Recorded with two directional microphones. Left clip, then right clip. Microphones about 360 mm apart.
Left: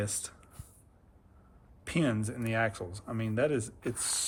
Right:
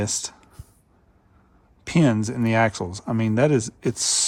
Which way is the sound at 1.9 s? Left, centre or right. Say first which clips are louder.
Right 10 dB; centre.